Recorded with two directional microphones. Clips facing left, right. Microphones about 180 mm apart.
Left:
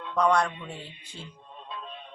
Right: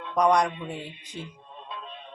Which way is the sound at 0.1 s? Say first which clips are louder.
Right 2 dB; 15° right (ahead or behind).